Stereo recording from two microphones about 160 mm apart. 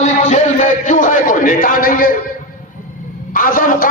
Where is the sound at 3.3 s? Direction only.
60° left (ahead or behind).